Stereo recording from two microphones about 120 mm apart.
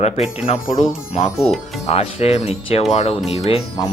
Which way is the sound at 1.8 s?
60° left (ahead or behind).